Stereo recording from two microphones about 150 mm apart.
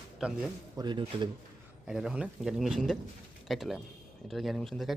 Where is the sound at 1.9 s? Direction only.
5° right (ahead or behind).